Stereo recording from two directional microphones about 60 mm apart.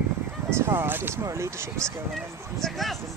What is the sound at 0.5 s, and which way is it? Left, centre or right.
Speech, right.